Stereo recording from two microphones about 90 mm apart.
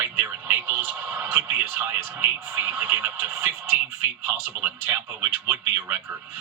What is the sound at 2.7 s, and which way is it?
Speech, 20° right (ahead or behind).